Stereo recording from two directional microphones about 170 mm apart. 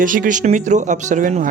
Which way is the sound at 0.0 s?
50° right (ahead or behind).